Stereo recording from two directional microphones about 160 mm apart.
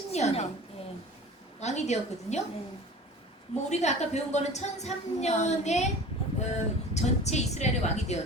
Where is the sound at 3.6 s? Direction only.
45° left (ahead or behind).